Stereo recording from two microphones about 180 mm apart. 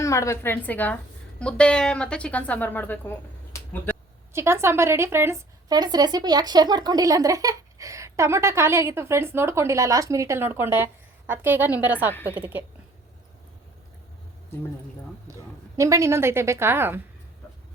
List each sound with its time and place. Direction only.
0.0 s a woman's voice: 15° left (ahead or behind)
4.3 s a woman's voice: 15° right (ahead or behind)
15.3 s a woman's voice: 20° right (ahead or behind)